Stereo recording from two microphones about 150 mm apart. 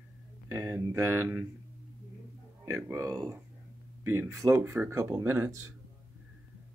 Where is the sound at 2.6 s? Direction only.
20° right (ahead or behind).